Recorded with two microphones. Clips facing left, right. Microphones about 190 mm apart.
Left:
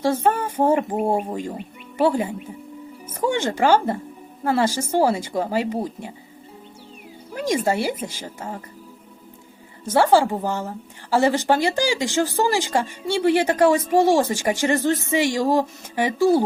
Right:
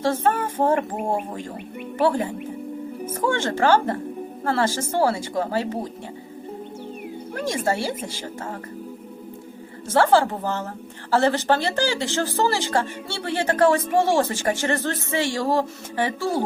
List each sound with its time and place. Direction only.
0.0 s speech: 15° left (ahead or behind)
7.3 s speech: 15° left (ahead or behind)
9.9 s speech: 15° left (ahead or behind)